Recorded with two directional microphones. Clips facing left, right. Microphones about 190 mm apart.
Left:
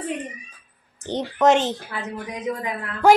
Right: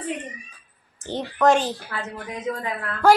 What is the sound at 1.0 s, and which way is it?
A child's voice, 20° left (ahead or behind).